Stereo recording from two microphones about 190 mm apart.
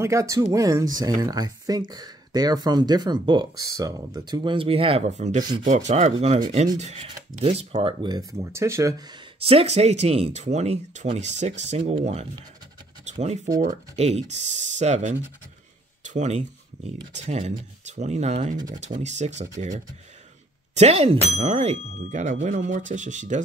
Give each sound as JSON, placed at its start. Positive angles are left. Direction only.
{"t": 0.0, "sound": "speech", "side_deg": -15}
{"t": 9.4, "sound": "speech", "side_deg": -30}
{"t": 13.0, "sound": "scratch", "side_deg": -35}
{"t": 13.9, "sound": "speech", "side_deg": -35}
{"t": 20.7, "sound": "speech", "side_deg": -35}